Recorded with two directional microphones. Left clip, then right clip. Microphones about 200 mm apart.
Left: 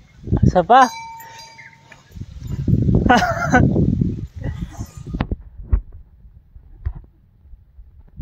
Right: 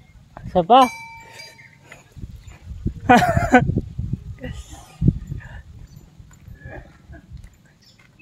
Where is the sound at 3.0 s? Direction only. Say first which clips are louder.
Right 1 dB; 20° right (ahead or behind).